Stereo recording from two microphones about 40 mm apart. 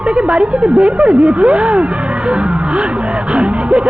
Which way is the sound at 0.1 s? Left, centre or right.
Right.